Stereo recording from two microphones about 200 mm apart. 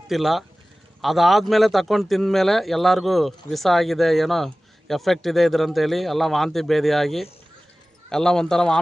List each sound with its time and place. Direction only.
0.1 s speech: centre (ahead or behind)